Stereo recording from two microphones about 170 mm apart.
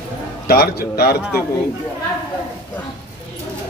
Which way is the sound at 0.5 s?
65° left (ahead or behind).